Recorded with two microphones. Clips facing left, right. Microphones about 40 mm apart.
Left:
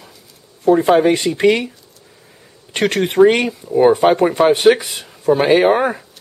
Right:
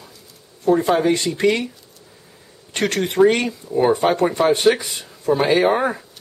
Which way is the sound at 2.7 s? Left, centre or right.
Left.